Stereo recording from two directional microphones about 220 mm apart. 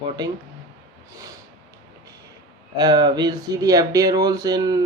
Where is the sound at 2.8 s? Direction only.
20° right (ahead or behind).